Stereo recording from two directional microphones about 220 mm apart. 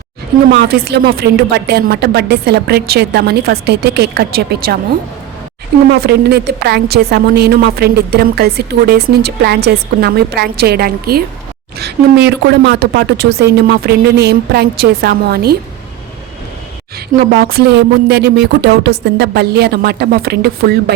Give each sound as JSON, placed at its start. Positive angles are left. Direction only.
{"t": 0.5, "sound": "a woman's voice", "side_deg": -45}
{"t": 5.9, "sound": "a woman's voice", "side_deg": -45}
{"t": 17.2, "sound": "a woman's voice", "side_deg": -45}